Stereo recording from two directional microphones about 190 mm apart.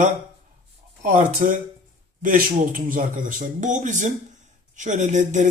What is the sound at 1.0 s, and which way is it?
Speech, 45° right (ahead or behind).